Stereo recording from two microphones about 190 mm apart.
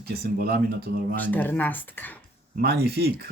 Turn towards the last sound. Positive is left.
turn(degrees=-55)  # may be behind; listen again after turning